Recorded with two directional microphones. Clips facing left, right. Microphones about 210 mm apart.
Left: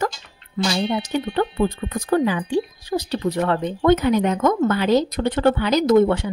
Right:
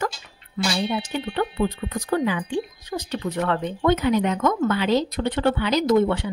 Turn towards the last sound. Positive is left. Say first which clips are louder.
# left 4 dB
turn(degrees=45)  # may be behind; listen again after turning